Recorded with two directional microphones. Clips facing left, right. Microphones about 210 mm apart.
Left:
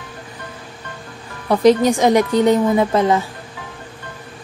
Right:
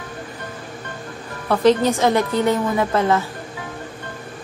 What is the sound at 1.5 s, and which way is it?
A woman's voice, 15° left (ahead or behind).